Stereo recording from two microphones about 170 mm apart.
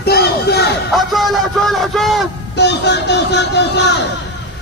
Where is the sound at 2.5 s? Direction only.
90° left.